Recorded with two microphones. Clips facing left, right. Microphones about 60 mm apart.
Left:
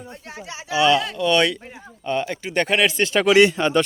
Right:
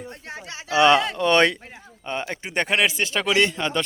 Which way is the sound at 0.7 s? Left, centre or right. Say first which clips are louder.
Right 1 dB; right.